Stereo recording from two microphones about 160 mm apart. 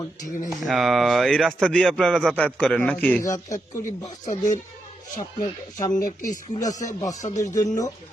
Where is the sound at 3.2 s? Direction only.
20° left (ahead or behind).